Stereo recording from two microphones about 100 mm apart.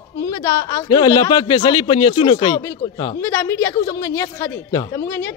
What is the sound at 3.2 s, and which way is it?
A woman's voice, 25° left (ahead or behind).